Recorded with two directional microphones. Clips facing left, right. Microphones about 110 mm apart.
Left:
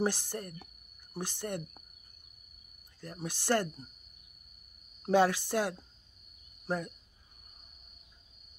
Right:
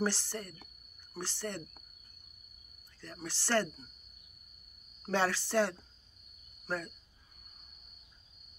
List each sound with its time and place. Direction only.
0.0 s speech: 15° left (ahead or behind)
3.0 s speech: 15° left (ahead or behind)
5.1 s speech: 15° left (ahead or behind)